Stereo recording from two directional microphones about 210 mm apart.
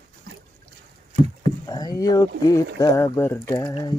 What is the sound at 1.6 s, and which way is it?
Speech, 20° left (ahead or behind).